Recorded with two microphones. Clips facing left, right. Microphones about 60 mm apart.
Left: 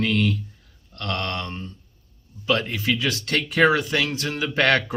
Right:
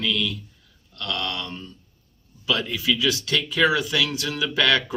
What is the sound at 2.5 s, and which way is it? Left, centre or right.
Speech, left.